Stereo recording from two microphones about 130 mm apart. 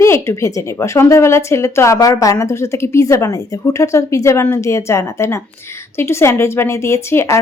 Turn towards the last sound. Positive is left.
turn(degrees=20)  # may be behind; listen again after turning